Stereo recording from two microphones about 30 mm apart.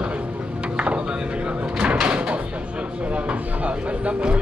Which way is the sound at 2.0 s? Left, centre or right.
Right.